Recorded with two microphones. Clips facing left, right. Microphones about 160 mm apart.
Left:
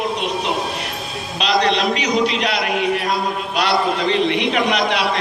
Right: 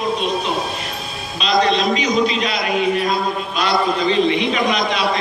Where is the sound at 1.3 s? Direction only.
70° left (ahead or behind).